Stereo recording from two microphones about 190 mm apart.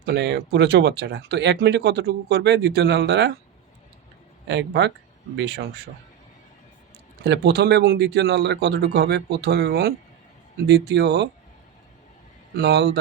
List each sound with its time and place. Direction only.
0.0 s speech: 60° right (ahead or behind)
4.4 s speech: 65° right (ahead or behind)
7.2 s speech: 60° right (ahead or behind)
12.5 s speech: 60° right (ahead or behind)